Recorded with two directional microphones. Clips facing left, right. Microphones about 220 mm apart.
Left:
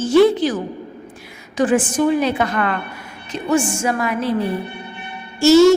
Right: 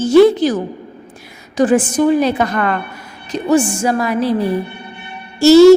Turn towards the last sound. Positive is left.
turn(degrees=-35)  # may be behind; listen again after turning